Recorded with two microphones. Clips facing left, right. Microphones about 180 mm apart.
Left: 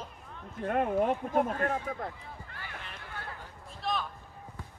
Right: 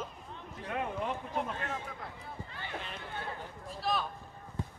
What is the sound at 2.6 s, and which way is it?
Run, 20° right (ahead or behind).